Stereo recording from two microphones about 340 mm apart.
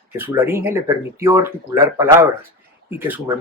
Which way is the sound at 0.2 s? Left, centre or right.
Centre.